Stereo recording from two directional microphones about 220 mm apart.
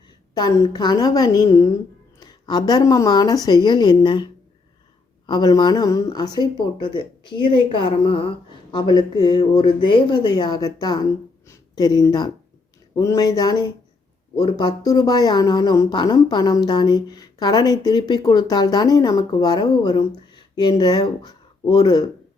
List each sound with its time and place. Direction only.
0.3 s speech: 15° left (ahead or behind)